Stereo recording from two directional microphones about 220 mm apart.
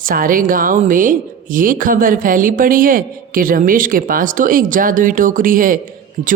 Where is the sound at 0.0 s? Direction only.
40° right (ahead or behind).